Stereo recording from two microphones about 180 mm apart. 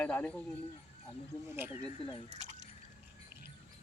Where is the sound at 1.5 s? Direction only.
10° right (ahead or behind).